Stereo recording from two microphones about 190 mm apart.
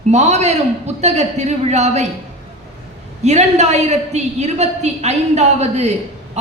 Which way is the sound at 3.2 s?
35° right (ahead or behind).